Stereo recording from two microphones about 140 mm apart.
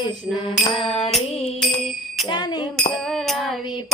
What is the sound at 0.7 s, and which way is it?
Music, 40° left (ahead or behind).